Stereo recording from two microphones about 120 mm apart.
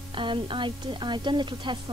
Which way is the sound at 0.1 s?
45° right (ahead or behind).